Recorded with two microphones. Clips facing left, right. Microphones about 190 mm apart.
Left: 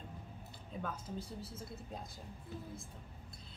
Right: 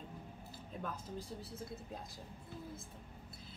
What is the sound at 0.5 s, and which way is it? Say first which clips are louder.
A woman's voice: left 1 dB; centre (ahead or behind).